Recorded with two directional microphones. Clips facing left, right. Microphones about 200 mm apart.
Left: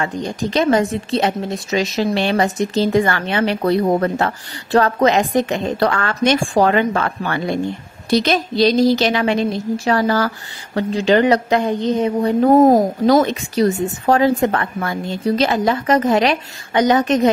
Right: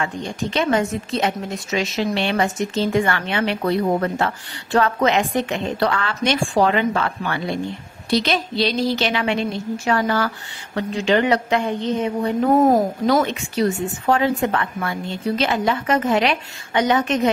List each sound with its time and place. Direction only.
0.0 s a woman's voice: 40° left (ahead or behind)